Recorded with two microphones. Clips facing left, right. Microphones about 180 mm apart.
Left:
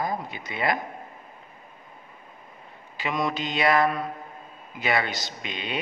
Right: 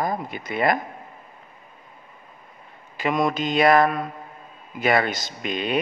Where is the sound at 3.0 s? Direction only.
50° right (ahead or behind).